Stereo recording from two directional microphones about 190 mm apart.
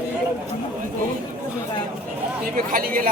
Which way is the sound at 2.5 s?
45° right (ahead or behind).